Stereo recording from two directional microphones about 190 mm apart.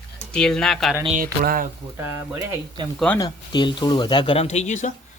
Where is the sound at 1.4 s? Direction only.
50° right (ahead or behind).